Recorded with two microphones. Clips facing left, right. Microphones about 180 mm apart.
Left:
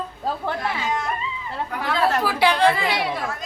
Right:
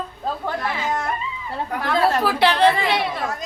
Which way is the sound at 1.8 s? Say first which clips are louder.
Right 2 dB; 10° left (ahead or behind).